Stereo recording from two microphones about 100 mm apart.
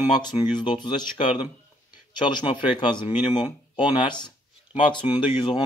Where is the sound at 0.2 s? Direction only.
45° left (ahead or behind).